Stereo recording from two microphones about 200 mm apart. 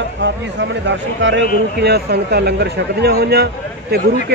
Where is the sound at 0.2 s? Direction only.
60° right (ahead or behind).